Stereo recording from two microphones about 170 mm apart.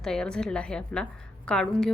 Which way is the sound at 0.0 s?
5° left (ahead or behind).